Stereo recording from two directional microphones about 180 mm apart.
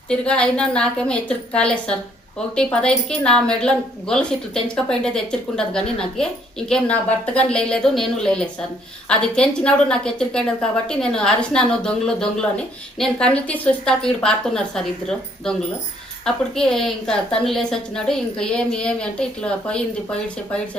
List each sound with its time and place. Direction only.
0.1 s a woman's voice: 5° left (ahead or behind)